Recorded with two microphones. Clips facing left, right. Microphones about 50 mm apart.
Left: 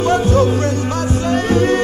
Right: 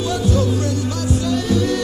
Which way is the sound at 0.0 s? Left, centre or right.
Left.